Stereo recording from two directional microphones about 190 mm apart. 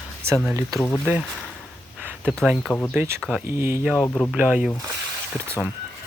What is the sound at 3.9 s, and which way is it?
Speech, 10° left (ahead or behind).